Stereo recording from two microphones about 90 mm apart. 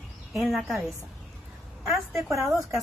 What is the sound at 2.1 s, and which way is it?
Speech, 35° right (ahead or behind).